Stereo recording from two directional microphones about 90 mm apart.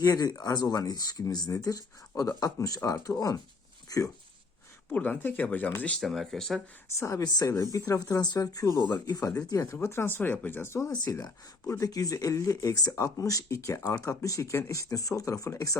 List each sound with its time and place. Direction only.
0.0 s speech: 45° left (ahead or behind)
4.9 s speech: 15° left (ahead or behind)
6.0 s speech: centre (ahead or behind)
6.8 s speech: 30° left (ahead or behind); by 9.3 s 50° left (ahead or behind)
9.5 s speech: 35° left (ahead or behind)
10.8 s speech: 40° left (ahead or behind)